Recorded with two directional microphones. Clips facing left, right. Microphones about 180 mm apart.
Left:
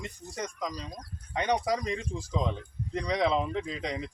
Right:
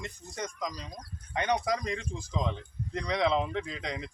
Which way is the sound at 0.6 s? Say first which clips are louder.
Left 2 dB; 25° left (ahead or behind).